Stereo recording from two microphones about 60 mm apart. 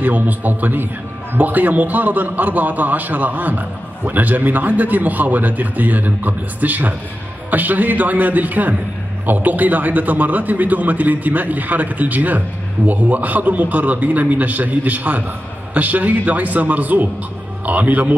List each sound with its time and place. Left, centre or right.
0.0 s a man's voice: right